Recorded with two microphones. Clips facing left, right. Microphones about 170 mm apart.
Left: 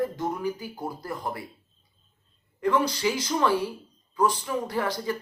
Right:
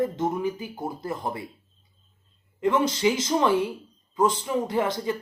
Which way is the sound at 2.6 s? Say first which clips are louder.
Right 2 dB; 20° right (ahead or behind).